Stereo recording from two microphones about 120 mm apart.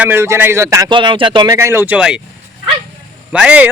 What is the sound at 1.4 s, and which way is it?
Speech, 20° right (ahead or behind).